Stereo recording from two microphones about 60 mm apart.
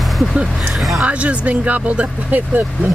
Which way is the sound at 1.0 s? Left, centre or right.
Right.